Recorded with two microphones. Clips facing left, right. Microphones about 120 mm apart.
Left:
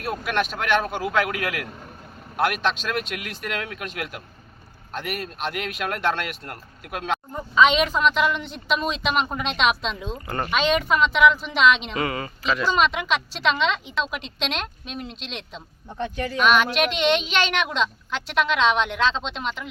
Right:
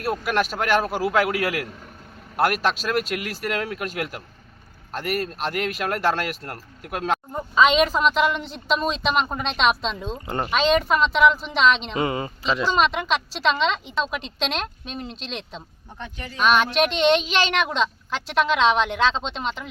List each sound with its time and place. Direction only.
0.0 s a woman's voice: 5° right (ahead or behind)
7.5 s a woman's voice: centre (ahead or behind)
10.2 s speech: 20° right (ahead or behind)
10.8 s a woman's voice: centre (ahead or behind)
11.9 s speech: 25° right (ahead or behind)
12.6 s a woman's voice: centre (ahead or behind)